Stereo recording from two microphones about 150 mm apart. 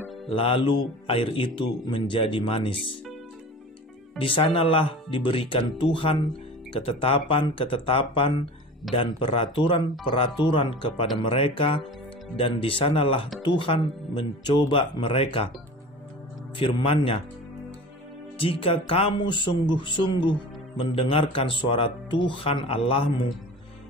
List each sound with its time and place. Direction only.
0.3 s speech: 35° left (ahead or behind)
4.2 s speech: 35° left (ahead or behind)
16.5 s speech: 35° left (ahead or behind)
18.4 s speech: 40° left (ahead or behind)